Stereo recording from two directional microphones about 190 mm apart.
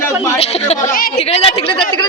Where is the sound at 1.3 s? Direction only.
30° left (ahead or behind).